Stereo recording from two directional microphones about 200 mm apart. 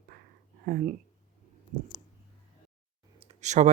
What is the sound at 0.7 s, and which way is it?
Speech, 45° right (ahead or behind).